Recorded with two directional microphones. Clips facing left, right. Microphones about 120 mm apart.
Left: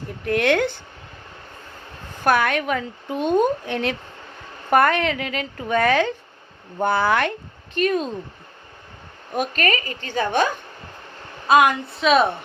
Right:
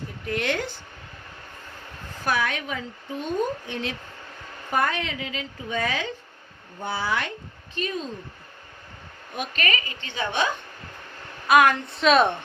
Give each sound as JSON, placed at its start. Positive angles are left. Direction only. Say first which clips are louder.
{"t": 0.3, "sound": "speech", "louder": "left 8 dB", "side_deg": 60}
{"t": 2.2, "sound": "speech", "louder": "left 7 dB", "side_deg": 60}
{"t": 9.3, "sound": "a woman's voice", "louder": "left 6 dB", "side_deg": 45}
{"t": 11.4, "sound": "a woman's voice", "louder": "left 2 dB", "side_deg": 25}
{"t": 11.9, "sound": "speech", "louder": "left 1 dB", "side_deg": 0}